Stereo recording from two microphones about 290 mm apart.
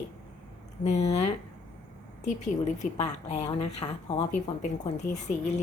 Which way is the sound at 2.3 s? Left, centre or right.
Left.